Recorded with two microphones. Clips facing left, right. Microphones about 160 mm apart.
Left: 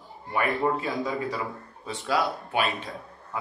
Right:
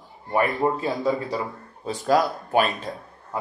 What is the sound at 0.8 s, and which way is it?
A man's voice, 40° right (ahead or behind).